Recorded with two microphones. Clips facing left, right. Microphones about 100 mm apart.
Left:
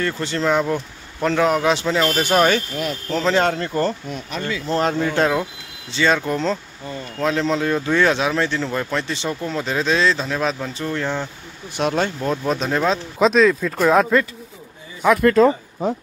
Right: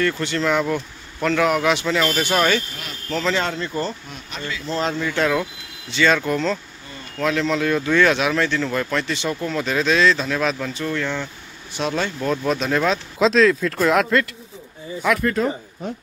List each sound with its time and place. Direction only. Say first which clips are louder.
0.0 s speech: even; 30° left (ahead or behind)
2.2 s speech: left 3 dB; 40° left (ahead or behind)
5.3 s speech: even; 25° left (ahead or behind)
11.7 s speech: left 3 dB; 45° left (ahead or behind)
12.2 s speech: even; 20° left (ahead or behind)
13.2 s speech: left 1 dB; 10° left (ahead or behind)